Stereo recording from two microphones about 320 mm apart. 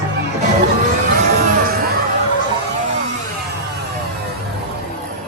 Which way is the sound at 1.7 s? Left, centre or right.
Right.